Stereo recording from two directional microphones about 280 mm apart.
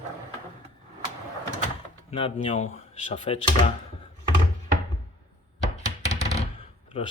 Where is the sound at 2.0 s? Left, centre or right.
Centre.